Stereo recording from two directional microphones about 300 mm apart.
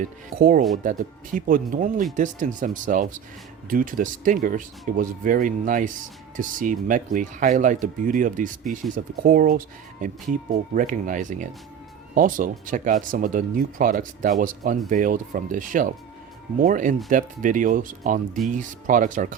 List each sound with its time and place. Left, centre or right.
0.0 s speech: right